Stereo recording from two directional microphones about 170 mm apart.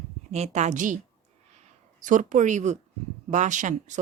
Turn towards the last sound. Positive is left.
turn(degrees=-45)  # may be behind; listen again after turning